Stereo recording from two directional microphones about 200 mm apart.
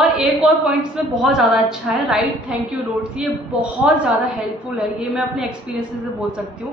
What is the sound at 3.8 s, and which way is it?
Speech, 10° right (ahead or behind).